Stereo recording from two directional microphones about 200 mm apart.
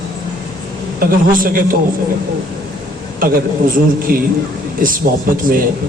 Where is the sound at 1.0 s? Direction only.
45° right (ahead or behind).